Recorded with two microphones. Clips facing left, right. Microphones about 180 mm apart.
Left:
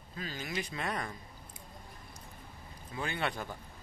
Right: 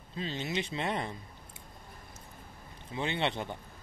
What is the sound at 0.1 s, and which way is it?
A man's voice, 25° right (ahead or behind).